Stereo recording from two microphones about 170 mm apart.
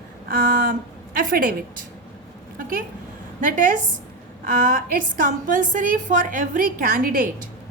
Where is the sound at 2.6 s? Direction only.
55° right (ahead or behind).